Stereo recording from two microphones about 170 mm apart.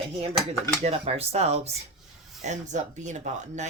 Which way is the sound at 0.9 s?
35° right (ahead or behind).